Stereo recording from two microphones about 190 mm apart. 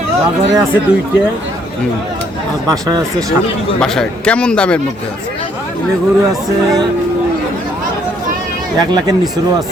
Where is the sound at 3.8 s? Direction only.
5° left (ahead or behind).